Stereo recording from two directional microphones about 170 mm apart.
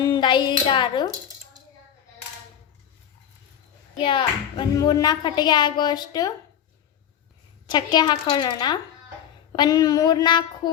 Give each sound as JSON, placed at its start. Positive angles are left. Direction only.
{"t": 0.0, "sound": "a woman's voice", "side_deg": 25}
{"t": 4.0, "sound": "speech", "side_deg": 25}
{"t": 7.7, "sound": "speech", "side_deg": 25}